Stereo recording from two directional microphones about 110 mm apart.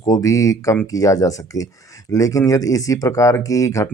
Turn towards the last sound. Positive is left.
turn(degrees=30)  # may be behind; listen again after turning